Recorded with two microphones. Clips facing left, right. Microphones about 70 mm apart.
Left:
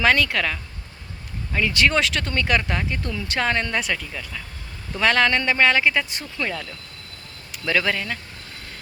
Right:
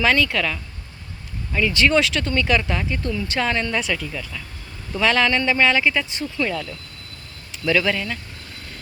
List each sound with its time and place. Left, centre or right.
0.0 s speech: left
0.3 s speech: left
3.9 s speech: left
4.9 s speech: left
5.8 s speech: left
7.6 s speech: left